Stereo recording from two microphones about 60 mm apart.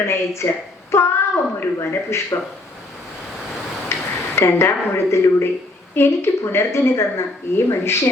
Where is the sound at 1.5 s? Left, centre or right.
Left.